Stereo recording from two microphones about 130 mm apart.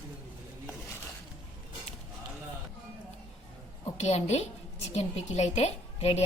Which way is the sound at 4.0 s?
55° left (ahead or behind).